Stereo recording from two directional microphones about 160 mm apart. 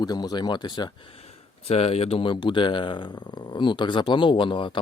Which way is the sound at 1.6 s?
40° left (ahead or behind).